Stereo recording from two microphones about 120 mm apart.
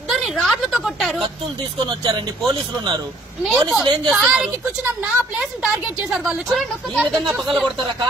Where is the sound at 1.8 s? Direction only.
35° right (ahead or behind).